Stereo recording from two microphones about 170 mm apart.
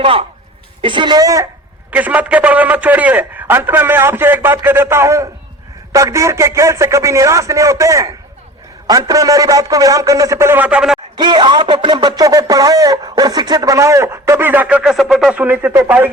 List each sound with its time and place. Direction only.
0.0 s speech: 35° right (ahead or behind)
1.9 s a man's voice: 10° right (ahead or behind)
11.2 s speech: 25° right (ahead or behind)